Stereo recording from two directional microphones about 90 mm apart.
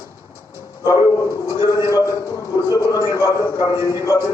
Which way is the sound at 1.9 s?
40° left (ahead or behind).